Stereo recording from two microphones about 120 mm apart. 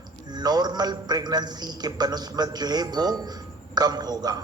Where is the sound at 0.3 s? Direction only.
35° right (ahead or behind).